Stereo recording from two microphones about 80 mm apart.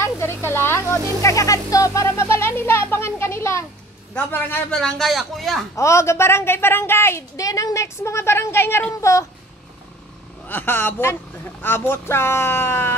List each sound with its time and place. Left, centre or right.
0.0 s music: left
4.1 s a man's voice: left
4.7 s a man's voice: centre
5.8 s a woman's voice: left
9.0 s speech: left
10.4 s a man's voice: left